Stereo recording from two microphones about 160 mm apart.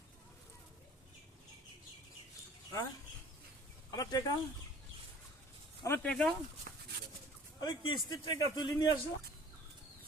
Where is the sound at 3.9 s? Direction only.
25° left (ahead or behind).